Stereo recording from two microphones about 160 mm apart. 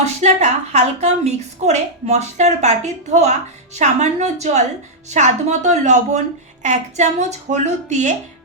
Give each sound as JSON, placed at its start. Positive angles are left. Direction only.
{"t": 0.0, "sound": "a woman's voice", "side_deg": -45}